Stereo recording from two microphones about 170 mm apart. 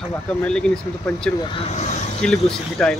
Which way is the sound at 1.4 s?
35° left (ahead or behind).